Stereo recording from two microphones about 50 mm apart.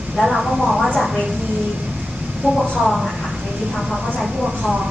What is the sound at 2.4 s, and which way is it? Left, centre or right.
Speech, right.